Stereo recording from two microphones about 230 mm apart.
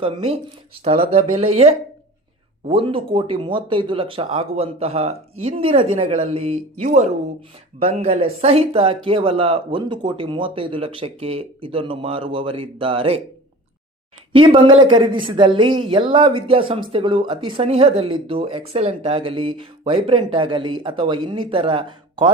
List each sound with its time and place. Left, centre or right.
0.0 s speech: right
14.3 s speech: right